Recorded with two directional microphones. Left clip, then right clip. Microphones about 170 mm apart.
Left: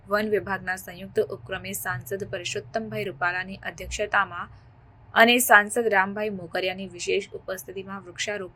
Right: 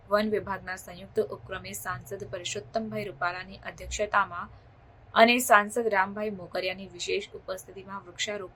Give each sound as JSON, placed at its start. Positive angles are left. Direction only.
{"t": 0.1, "sound": "speech", "side_deg": 15}